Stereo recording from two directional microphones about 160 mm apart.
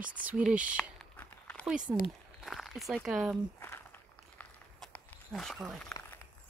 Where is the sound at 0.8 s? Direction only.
10° left (ahead or behind).